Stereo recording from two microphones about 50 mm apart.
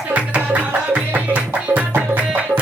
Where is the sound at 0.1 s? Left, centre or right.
Right.